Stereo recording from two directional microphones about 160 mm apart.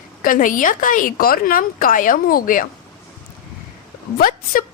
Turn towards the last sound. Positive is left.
turn(degrees=65)  # may be behind; listen again after turning